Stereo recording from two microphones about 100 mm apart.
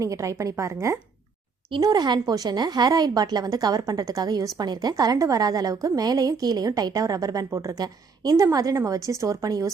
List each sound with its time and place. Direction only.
0.0 s a woman's voice: 30° right (ahead or behind)
1.8 s a woman's voice: 45° right (ahead or behind)